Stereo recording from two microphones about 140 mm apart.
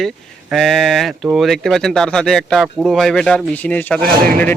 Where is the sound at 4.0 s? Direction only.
90° right.